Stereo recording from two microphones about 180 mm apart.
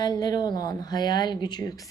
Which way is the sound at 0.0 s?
20° left (ahead or behind).